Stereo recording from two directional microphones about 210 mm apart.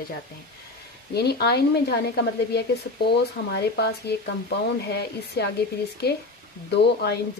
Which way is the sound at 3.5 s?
50° left (ahead or behind).